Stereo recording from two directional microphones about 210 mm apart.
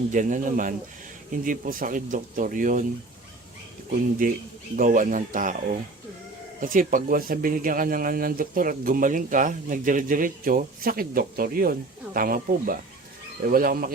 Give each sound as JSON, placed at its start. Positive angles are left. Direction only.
{"t": 0.1, "sound": "speech", "side_deg": -35}
{"t": 4.2, "sound": "speech", "side_deg": -40}